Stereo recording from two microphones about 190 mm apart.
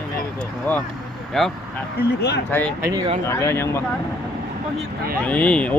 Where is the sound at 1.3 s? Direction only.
Centre (ahead or behind).